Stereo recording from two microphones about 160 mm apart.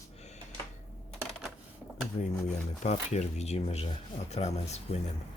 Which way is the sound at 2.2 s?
35° left (ahead or behind).